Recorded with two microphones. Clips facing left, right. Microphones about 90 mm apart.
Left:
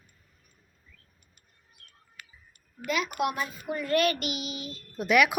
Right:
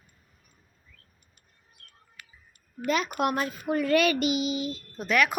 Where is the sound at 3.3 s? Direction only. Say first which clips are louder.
Right 5 dB; 65° right (ahead or behind); by 4.0 s 90° right.